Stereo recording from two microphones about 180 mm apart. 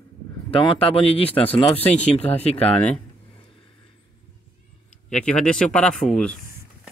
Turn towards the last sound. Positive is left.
turn(degrees=5)  # may be behind; listen again after turning